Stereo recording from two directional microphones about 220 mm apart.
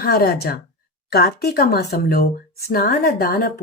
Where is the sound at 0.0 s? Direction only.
45° left (ahead or behind).